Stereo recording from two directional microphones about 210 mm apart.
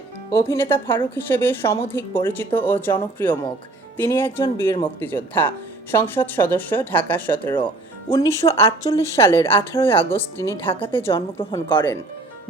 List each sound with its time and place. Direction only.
0.3 s speech: 15° left (ahead or behind)
10.9 s a woman's voice: 25° left (ahead or behind)